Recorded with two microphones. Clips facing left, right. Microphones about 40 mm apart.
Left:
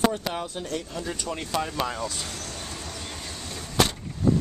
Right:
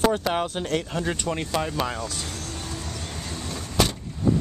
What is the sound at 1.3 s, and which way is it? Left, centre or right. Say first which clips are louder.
Speech: right 2 dB; centre.